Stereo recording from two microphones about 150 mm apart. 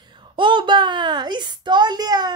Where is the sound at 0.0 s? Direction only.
30° right (ahead or behind).